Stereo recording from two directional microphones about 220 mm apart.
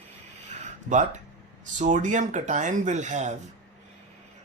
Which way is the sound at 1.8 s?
35° right (ahead or behind).